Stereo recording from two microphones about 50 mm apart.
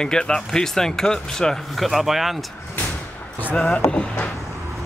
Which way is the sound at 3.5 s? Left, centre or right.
Left.